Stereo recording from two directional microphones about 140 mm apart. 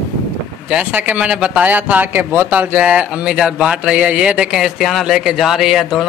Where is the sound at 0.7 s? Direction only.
10° right (ahead or behind).